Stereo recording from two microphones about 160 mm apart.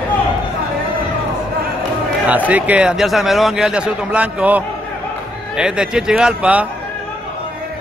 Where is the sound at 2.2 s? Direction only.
10° right (ahead or behind).